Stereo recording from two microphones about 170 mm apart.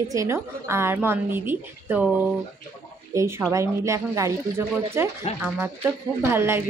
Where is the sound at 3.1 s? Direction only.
20° right (ahead or behind).